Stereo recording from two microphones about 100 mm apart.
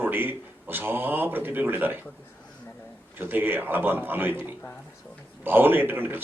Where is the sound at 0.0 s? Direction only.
20° right (ahead or behind).